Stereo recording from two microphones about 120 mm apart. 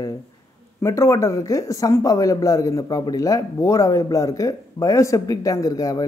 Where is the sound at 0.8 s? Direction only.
25° left (ahead or behind).